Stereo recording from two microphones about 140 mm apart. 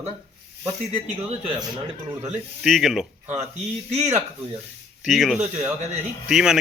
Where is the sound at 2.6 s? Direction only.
Centre (ahead or behind).